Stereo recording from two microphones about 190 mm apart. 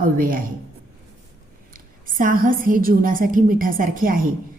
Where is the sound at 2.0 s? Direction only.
45° right (ahead or behind).